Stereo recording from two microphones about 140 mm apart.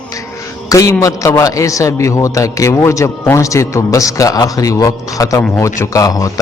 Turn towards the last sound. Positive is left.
turn(degrees=25)  # may be behind; listen again after turning